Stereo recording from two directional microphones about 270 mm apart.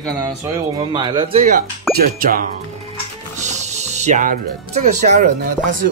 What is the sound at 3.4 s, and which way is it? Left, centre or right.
Speech, right.